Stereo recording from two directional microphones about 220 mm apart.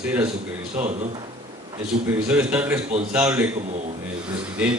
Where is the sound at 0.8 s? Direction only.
30° right (ahead or behind).